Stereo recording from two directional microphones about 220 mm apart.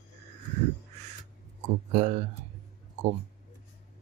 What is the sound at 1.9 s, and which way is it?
Speech, 30° right (ahead or behind).